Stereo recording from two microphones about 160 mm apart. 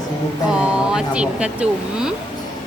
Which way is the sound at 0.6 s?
5° right (ahead or behind).